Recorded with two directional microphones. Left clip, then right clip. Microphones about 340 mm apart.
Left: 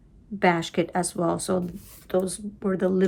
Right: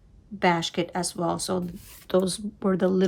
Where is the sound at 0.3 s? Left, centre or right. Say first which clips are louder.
Left 1 dB; centre.